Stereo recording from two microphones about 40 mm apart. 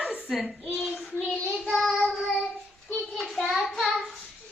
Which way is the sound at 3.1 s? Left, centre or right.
Centre.